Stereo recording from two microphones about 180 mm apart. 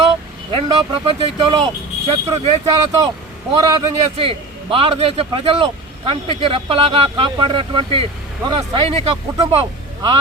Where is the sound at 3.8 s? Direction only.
30° right (ahead or behind).